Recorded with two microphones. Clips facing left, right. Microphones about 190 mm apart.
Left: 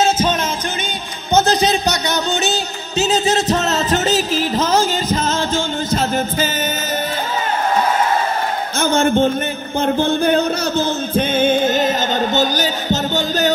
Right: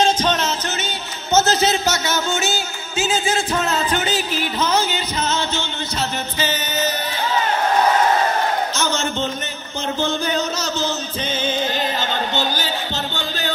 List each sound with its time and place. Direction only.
0.0 s music: 10° left (ahead or behind)
3.0 s music: 40° left (ahead or behind)
8.7 s a sound: 55° left (ahead or behind)
9.8 s music: 55° left (ahead or behind)